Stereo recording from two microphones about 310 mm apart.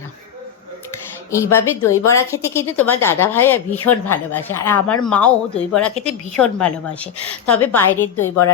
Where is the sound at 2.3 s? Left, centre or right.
Centre.